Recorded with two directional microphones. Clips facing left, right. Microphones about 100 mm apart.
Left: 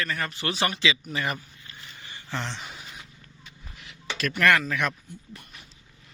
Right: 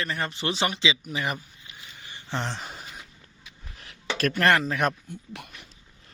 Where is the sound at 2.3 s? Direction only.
40° right (ahead or behind).